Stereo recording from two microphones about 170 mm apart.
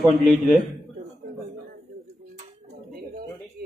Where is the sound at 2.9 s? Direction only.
60° right (ahead or behind).